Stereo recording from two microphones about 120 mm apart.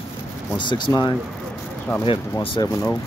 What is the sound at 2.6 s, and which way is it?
Speech, 35° left (ahead or behind).